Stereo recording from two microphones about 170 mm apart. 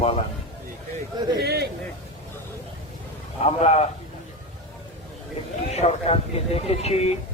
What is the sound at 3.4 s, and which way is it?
Speech, 40° left (ahead or behind).